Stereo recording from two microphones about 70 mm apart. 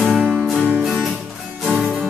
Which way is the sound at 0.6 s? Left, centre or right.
Centre.